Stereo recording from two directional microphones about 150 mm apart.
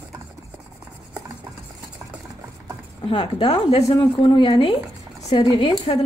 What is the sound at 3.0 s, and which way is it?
Speech, 35° left (ahead or behind).